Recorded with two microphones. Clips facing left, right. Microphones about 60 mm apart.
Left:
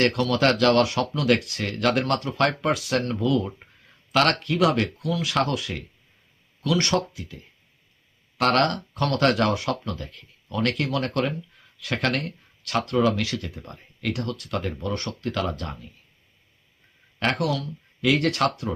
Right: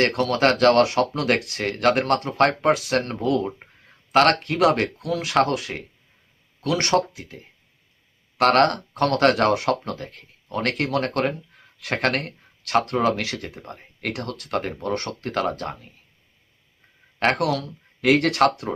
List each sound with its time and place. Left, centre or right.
0.1 s speech: right
17.2 s speech: right